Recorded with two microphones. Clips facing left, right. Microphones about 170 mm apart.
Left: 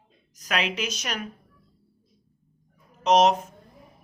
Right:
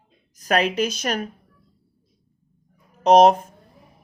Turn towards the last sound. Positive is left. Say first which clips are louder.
# right 6 dB
turn(degrees=-55)  # may be behind; listen again after turning